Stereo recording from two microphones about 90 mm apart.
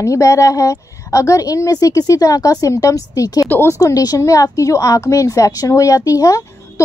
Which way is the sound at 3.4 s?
20° left (ahead or behind).